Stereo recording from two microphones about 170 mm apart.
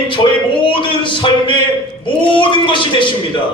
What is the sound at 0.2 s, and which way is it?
A man's voice, 30° left (ahead or behind).